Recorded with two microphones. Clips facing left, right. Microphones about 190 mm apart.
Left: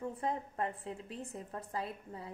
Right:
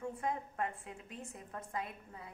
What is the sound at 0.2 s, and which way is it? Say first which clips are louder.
A woman's voice: left 2 dB; 35° left (ahead or behind).